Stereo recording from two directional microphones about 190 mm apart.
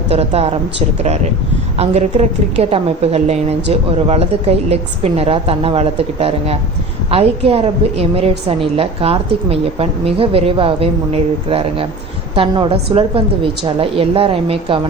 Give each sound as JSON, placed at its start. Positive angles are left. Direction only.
{"t": 0.1, "sound": "a woman's voice", "side_deg": -35}